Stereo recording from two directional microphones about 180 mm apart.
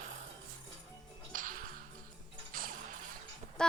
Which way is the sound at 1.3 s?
50° right (ahead or behind).